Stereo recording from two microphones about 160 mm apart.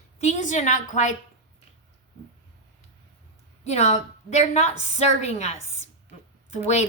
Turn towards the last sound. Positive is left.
turn(degrees=45)  # may be behind; listen again after turning